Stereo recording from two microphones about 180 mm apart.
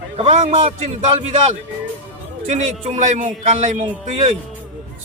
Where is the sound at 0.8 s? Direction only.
40° right (ahead or behind).